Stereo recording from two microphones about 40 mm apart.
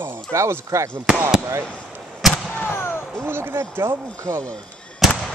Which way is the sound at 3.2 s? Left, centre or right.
Right.